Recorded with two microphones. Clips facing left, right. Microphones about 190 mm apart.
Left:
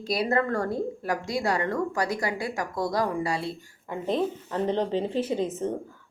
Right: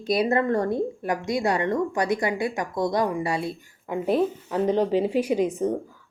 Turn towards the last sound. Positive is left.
turn(degrees=-15)  # may be behind; listen again after turning